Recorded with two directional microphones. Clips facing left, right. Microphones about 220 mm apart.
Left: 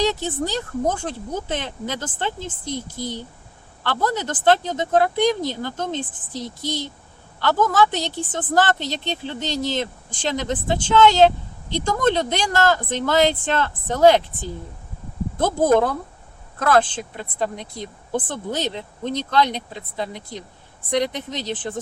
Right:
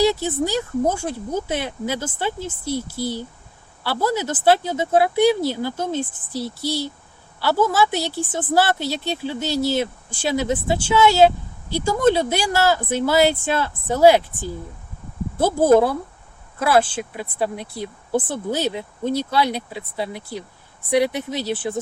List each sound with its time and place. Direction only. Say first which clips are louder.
0.0 s a woman's voice: right 3 dB; 10° right (ahead or behind)